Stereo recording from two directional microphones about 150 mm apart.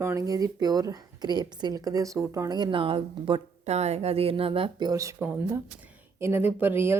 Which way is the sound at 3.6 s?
45° right (ahead or behind).